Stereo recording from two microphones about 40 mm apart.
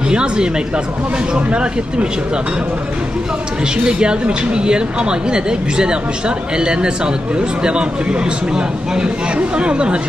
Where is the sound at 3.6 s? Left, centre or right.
Right.